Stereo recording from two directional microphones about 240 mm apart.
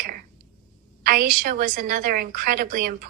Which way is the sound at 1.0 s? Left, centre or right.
Right.